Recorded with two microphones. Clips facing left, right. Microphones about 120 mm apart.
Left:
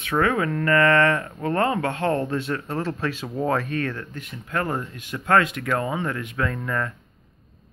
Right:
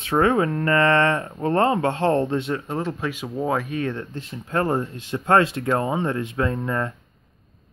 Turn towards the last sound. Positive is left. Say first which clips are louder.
# right 2 dB
turn(degrees=-25)  # may be behind; listen again after turning